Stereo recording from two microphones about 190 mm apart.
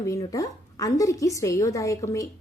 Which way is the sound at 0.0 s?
15° left (ahead or behind).